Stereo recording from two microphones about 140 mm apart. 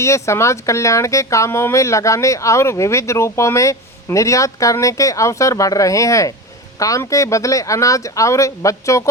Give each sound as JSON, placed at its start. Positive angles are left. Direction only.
{"t": 0.0, "sound": "speech", "side_deg": 20}